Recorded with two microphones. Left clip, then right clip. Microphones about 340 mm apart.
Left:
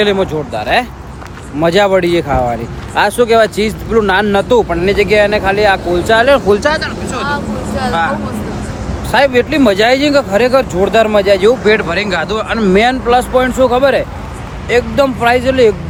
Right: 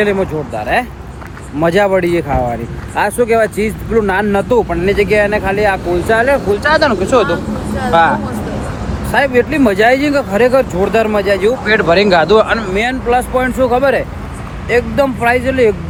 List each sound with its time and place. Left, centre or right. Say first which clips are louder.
0.2 s speech: left 2 dB; centre
6.8 s speech: right 7 dB; centre
9.4 s speech: left 1 dB; centre
11.3 s speech: left 4 dB; centre
11.7 s speech: right 3 dB; centre
12.7 s speech: left 5 dB; centre
13.1 s speech: left 3 dB; centre